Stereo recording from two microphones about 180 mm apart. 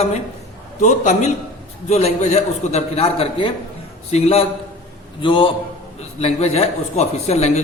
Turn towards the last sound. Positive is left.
turn(degrees=35)  # may be behind; listen again after turning